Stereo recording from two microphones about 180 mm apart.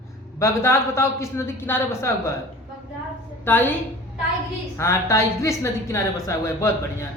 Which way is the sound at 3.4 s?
10° left (ahead or behind).